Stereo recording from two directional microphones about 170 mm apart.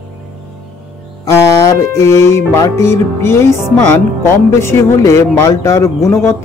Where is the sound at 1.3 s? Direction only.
20° left (ahead or behind).